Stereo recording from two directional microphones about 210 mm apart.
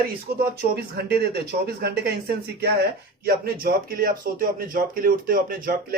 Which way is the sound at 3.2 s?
45° right (ahead or behind).